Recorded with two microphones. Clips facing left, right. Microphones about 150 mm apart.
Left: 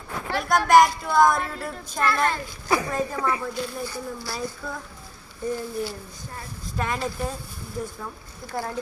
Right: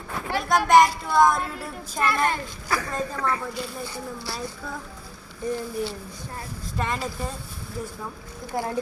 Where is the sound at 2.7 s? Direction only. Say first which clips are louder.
Left 4 dB; 20° left (ahead or behind).